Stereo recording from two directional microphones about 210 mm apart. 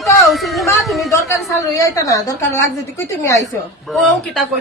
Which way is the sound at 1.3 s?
15° left (ahead or behind).